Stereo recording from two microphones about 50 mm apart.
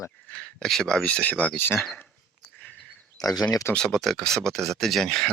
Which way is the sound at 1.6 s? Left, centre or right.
Left.